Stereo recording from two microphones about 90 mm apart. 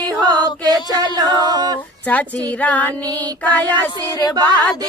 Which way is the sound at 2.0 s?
15° left (ahead or behind).